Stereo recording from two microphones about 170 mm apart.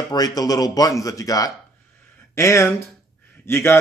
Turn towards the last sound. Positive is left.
turn(degrees=15)  # may be behind; listen again after turning